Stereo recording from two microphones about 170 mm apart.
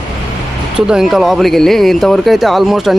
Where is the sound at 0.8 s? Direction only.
5° right (ahead or behind).